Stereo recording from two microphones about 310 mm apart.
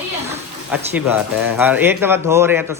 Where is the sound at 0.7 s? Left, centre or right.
Centre.